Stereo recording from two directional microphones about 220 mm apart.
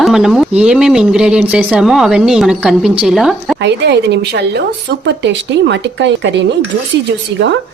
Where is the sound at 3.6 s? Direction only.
50° right (ahead or behind).